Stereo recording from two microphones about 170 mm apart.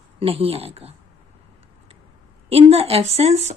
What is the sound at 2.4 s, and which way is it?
Speech, 35° right (ahead or behind).